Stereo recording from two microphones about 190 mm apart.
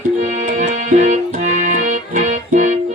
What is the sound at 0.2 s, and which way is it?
Music, 40° right (ahead or behind).